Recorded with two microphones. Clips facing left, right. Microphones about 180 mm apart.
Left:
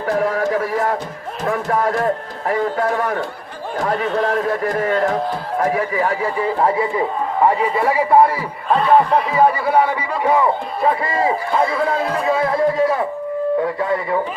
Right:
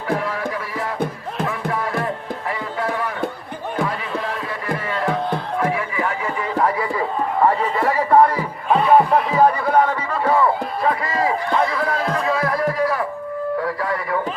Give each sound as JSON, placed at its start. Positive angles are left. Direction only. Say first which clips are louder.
{"t": 0.2, "sound": "a sound", "louder": "left 7 dB", "side_deg": 45}
{"t": 0.5, "sound": "music", "louder": "left 7 dB", "side_deg": 45}
{"t": 3.8, "sound": "a sound", "louder": "left 7 dB", "side_deg": 45}
{"t": 4.8, "sound": "music", "louder": "left 5 dB", "side_deg": 45}
{"t": 5.5, "sound": "a sound", "louder": "left 6 dB", "side_deg": 40}
{"t": 7.4, "sound": "speech", "louder": "left 3 dB", "side_deg": 10}
{"t": 8.7, "sound": "speech", "louder": "even", "side_deg": 0}
{"t": 12.2, "sound": "music", "louder": "left 6 dB", "side_deg": 25}
{"t": 13.6, "sound": "speech", "louder": "left 4 dB", "side_deg": 25}